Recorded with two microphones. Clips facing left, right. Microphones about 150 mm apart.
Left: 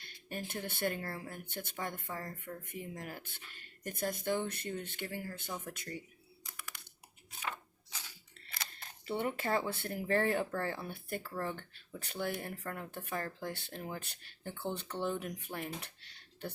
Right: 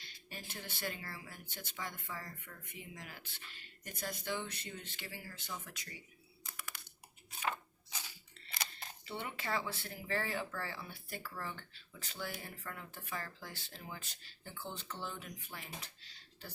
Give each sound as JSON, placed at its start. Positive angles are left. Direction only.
{"t": 0.0, "sound": "speech", "side_deg": 50}
{"t": 9.0, "sound": "speech", "side_deg": 50}